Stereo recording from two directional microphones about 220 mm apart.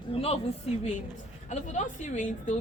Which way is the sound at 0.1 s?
25° left (ahead or behind).